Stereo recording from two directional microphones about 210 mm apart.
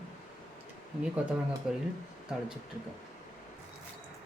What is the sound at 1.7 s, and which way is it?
Speech, centre (ahead or behind).